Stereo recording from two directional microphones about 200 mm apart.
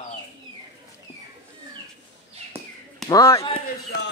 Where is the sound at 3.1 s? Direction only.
15° left (ahead or behind).